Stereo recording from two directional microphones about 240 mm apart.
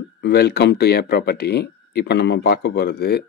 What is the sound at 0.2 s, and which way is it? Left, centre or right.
Speech, left.